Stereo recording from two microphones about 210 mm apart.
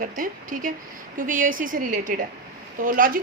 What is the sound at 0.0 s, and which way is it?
A woman's voice, 40° right (ahead or behind).